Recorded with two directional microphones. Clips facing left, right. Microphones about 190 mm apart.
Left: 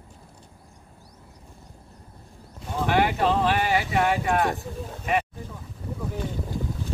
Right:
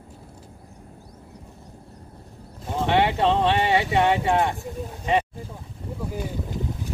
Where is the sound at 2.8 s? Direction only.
25° right (ahead or behind).